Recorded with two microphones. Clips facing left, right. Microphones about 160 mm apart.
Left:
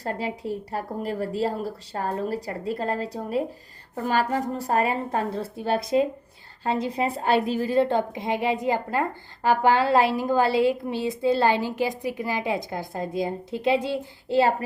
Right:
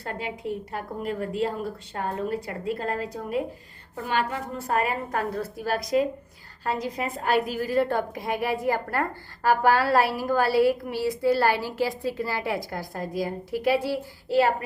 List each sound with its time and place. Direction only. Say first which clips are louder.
0.0 s a woman's voice: left 3 dB; 35° left (ahead or behind)